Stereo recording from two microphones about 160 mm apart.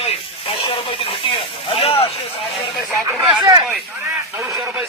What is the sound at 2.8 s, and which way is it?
Speech, centre (ahead or behind).